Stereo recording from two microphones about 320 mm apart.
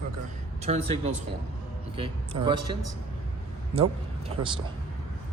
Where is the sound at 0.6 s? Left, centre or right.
Centre.